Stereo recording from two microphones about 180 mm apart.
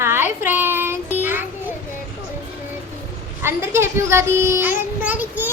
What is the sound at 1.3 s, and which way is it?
Children playing, 10° right (ahead or behind).